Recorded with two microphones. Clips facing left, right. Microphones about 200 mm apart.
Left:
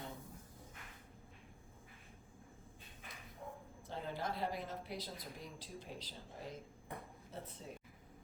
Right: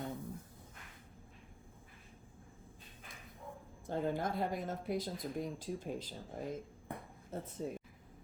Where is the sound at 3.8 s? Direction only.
50° right (ahead or behind).